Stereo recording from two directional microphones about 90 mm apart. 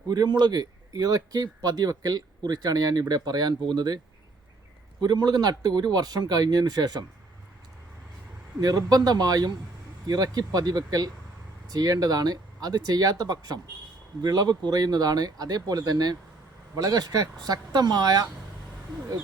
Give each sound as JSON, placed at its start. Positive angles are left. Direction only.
{"t": 0.1, "sound": "speech", "side_deg": -50}
{"t": 8.6, "sound": "speech", "side_deg": -45}